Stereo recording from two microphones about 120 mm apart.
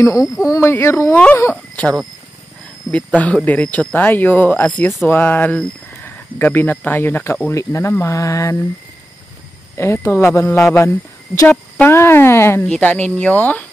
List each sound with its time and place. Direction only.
0.0 s speech: 25° left (ahead or behind)
1.5 s a sound: 10° left (ahead or behind)
3.2 s speech: 10° left (ahead or behind)
9.8 s speech: 20° left (ahead or behind)
12.6 s speech: 10° left (ahead or behind)